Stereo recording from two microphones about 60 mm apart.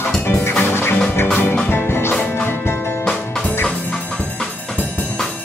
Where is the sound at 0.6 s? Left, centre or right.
Left.